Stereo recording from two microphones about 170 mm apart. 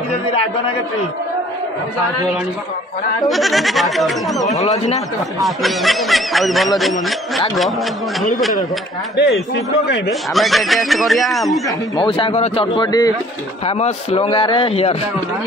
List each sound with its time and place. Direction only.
3.3 s speech: centre (ahead or behind)
4.5 s speech: 40° left (ahead or behind)
5.4 s speech: centre (ahead or behind)
10.3 s speech: centre (ahead or behind)
12.0 s a man's voice: 30° left (ahead or behind)
13.7 s speech: 40° left (ahead or behind)